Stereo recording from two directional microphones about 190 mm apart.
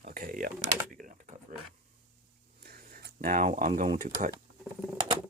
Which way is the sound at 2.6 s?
55° right (ahead or behind).